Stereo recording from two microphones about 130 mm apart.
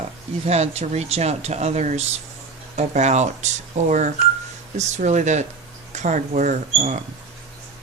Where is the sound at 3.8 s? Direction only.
80° right.